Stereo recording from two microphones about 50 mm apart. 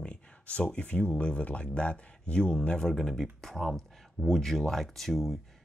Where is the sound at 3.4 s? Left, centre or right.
Centre.